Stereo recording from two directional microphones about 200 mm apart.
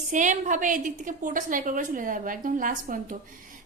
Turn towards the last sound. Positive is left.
turn(degrees=-40)  # may be behind; listen again after turning